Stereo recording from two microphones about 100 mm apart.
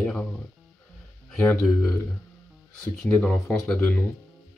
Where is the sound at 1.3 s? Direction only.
20° left (ahead or behind).